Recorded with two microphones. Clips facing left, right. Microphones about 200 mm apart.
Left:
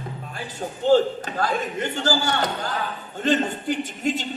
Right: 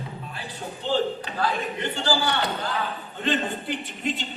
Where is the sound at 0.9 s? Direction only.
45° left (ahead or behind).